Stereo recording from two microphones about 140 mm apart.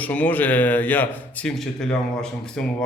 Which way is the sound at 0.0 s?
10° left (ahead or behind).